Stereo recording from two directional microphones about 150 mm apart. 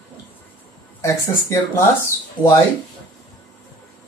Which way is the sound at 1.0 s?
20° left (ahead or behind).